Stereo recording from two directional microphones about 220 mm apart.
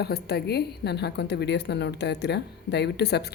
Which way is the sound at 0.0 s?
45° left (ahead or behind).